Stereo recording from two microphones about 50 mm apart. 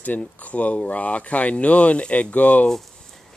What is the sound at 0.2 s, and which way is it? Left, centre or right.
Speech, left.